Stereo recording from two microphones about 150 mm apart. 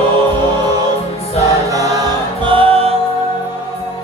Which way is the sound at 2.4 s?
35° right (ahead or behind).